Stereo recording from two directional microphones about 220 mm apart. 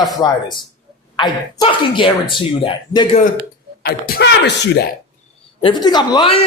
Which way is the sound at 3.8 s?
45° left (ahead or behind).